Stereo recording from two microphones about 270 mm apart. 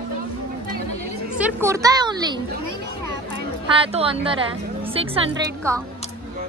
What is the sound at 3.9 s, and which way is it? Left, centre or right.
A woman's voice, right.